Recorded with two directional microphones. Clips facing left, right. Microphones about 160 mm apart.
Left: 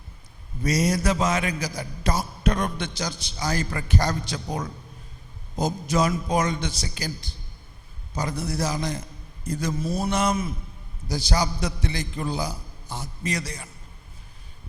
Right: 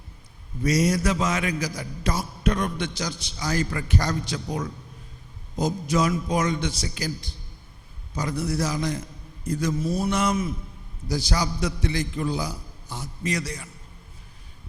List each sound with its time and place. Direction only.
0.6 s a man's voice: 35° left (ahead or behind)
8.1 s a man's voice: 30° left (ahead or behind)